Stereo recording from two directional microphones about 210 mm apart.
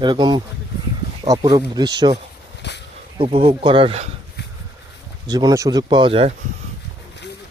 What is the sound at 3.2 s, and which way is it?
Speech, 25° right (ahead or behind).